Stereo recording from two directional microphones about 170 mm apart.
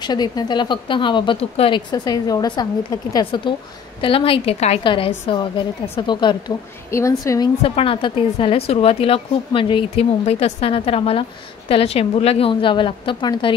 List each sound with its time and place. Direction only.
0.0 s a woman's voice: 25° left (ahead or behind)
6.9 s a woman's voice: 15° left (ahead or behind)
7.6 s a woman's voice: 35° left (ahead or behind)